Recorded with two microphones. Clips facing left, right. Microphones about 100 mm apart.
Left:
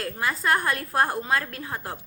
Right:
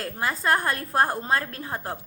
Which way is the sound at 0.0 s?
30° right (ahead or behind).